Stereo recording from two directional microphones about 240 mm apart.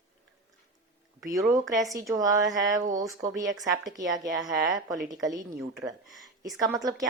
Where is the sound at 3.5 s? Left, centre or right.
Centre.